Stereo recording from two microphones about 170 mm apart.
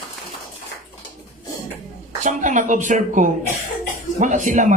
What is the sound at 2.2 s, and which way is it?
Speech, 45° right (ahead or behind).